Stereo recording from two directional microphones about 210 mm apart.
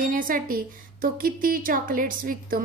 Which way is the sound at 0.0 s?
40° right (ahead or behind).